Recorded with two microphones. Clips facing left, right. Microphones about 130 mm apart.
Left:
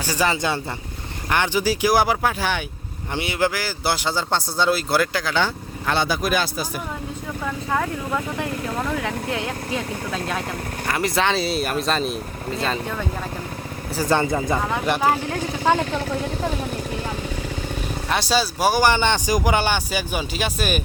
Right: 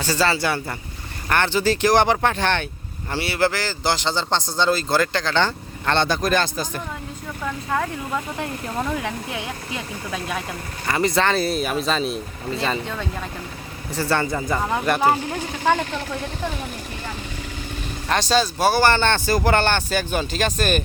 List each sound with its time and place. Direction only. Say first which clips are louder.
0.0 s a man's voice: right 1 dB; 15° left (ahead or behind)
10.8 s speech: right 2 dB; centre (ahead or behind)
13.9 s a man's voice: left 2 dB; 15° left (ahead or behind)
18.1 s a man's voice: right 2 dB; 10° left (ahead or behind)